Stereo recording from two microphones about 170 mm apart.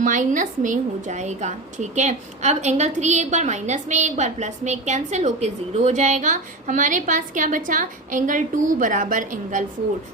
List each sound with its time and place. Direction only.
0.0 s a woman's voice: 50° right (ahead or behind)